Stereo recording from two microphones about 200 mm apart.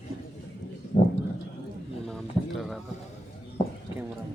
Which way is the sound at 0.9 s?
40° left (ahead or behind).